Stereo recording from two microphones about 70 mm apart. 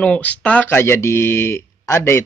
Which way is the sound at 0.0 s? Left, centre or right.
Left.